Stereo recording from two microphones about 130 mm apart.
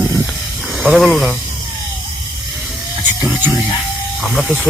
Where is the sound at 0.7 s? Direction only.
5° right (ahead or behind).